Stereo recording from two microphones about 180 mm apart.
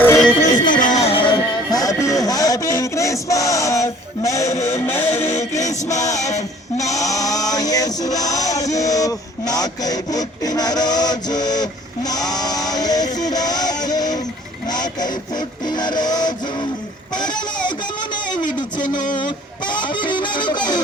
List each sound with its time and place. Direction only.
0.0 s music: 10° left (ahead or behind)
0.7 s music: 45° left (ahead or behind); by 5.4 s 15° left (ahead or behind)
5.4 s music: 40° left (ahead or behind)
6.9 s music: 20° left (ahead or behind)
8.6 s radio: 20° left (ahead or behind)
14.7 s vehicle: 25° left (ahead or behind)
15.6 s music: 25° left (ahead or behind)
17.2 s a sound: 25° left (ahead or behind)
19.7 s music: 25° left (ahead or behind)